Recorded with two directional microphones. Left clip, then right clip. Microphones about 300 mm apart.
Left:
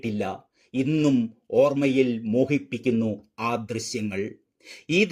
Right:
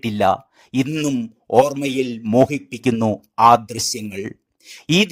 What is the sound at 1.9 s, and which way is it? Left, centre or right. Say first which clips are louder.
A man's voice: right 1 dB; right.